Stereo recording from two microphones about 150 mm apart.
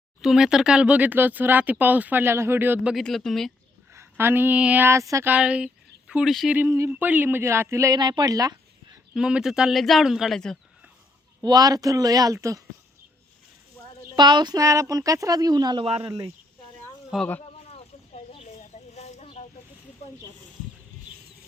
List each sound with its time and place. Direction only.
0.2 s speech: 5° right (ahead or behind)
2.9 s speech: centre (ahead or behind)
3.9 s speech: 15° right (ahead or behind); by 6.6 s centre (ahead or behind)
6.6 s speech: 15° right (ahead or behind)
9.1 s speech: 5° right (ahead or behind)
11.4 s a woman's voice: 25° right (ahead or behind)
13.8 s a sound: 10° left (ahead or behind)
14.2 s a woman's voice: 30° right (ahead or behind)
17.1 s speech: 5° right (ahead or behind)
17.6 s snake: 45° left (ahead or behind)